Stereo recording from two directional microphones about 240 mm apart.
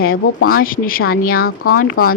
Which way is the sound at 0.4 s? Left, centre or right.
Left.